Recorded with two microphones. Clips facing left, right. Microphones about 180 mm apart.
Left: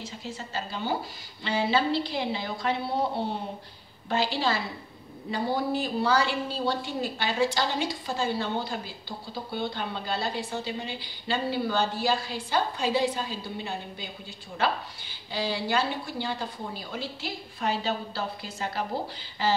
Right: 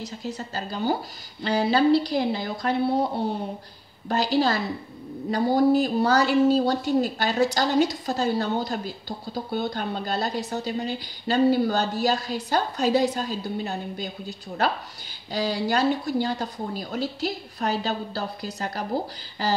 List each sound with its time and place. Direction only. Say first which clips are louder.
0.0 s speech: right 5 dB; 40° right (ahead or behind)
4.1 s speech: right 5 dB; 40° right (ahead or behind)